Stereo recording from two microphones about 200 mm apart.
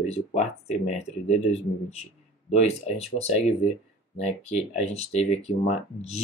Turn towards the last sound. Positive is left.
turn(degrees=30)  # may be behind; listen again after turning